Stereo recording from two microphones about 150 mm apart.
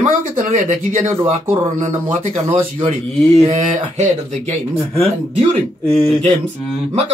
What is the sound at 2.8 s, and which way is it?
Speech, 50° right (ahead or behind).